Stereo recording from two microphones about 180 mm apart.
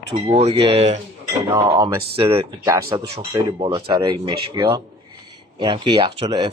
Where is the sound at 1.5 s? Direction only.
20° right (ahead or behind).